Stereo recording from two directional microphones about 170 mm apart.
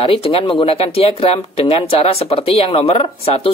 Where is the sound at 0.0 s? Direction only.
35° left (ahead or behind).